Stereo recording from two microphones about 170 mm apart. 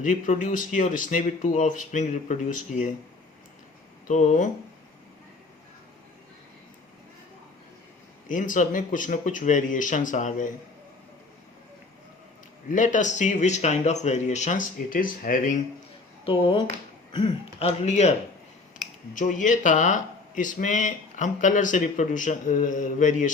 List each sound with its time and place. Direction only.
0.0 s speech: 50° left (ahead or behind)
4.1 s speech: 45° left (ahead or behind)
8.3 s speech: 50° left (ahead or behind)
12.7 s speech: 50° left (ahead or behind)
16.2 s speech: 30° left (ahead or behind)
19.1 s speech: 50° left (ahead or behind)